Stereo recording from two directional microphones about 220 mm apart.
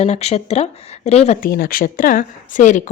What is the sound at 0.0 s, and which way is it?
Speech, 30° left (ahead or behind).